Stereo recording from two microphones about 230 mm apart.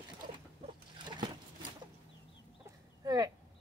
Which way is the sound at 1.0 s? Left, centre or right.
Centre.